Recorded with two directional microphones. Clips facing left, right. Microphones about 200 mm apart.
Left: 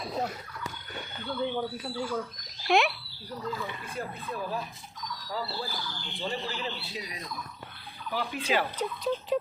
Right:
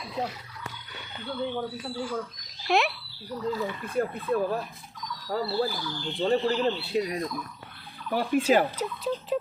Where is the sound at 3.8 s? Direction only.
60° right (ahead or behind).